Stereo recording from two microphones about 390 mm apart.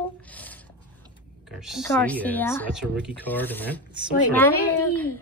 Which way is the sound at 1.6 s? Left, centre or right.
Centre.